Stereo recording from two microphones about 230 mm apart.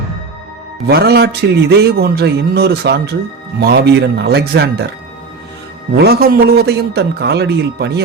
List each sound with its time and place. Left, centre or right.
0.9 s a man's voice: right
5.9 s a man's voice: right